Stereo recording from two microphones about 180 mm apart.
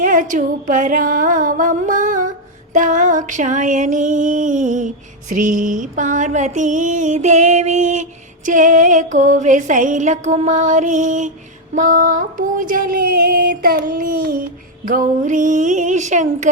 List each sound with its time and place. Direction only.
0.0 s music: 50° right (ahead or behind)